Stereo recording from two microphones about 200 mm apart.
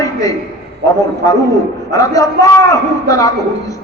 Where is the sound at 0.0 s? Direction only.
15° left (ahead or behind).